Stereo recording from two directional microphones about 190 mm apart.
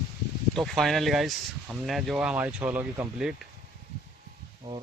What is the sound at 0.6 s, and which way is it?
Speech, centre (ahead or behind).